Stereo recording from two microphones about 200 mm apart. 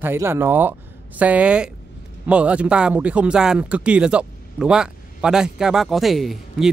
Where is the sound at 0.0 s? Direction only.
10° right (ahead or behind).